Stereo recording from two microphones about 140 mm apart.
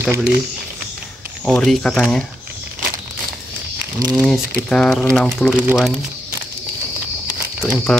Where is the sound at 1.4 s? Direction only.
5° left (ahead or behind).